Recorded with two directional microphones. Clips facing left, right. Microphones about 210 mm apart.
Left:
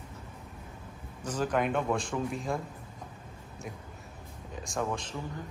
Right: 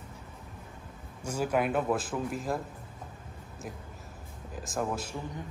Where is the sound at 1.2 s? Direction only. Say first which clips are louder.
Right 1 dB; 10° right (ahead or behind).